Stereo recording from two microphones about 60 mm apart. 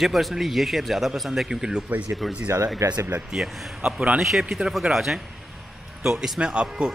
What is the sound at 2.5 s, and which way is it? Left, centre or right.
Speech, right.